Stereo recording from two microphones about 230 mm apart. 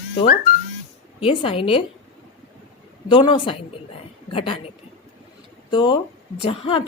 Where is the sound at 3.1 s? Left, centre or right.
Left.